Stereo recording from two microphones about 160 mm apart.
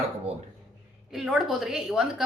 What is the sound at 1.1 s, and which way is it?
A woman's voice, centre (ahead or behind).